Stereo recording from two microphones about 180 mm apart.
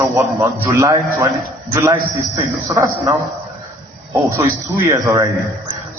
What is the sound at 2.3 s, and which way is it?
Speech, 20° right (ahead or behind).